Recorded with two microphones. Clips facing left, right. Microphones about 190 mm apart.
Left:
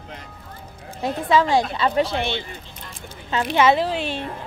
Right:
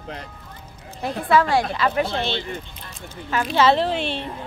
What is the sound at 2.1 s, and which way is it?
Speech, 15° left (ahead or behind).